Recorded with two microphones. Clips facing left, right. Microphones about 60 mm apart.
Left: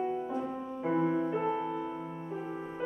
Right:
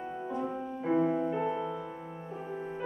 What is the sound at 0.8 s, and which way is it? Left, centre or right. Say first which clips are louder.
Music: right 1 dB; centre.